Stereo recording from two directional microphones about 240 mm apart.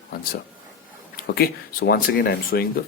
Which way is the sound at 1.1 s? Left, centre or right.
Left.